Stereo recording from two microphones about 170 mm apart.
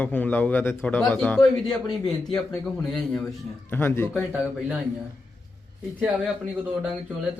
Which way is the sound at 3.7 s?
15° left (ahead or behind).